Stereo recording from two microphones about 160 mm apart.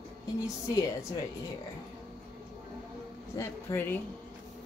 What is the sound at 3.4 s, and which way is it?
Speech, 15° left (ahead or behind).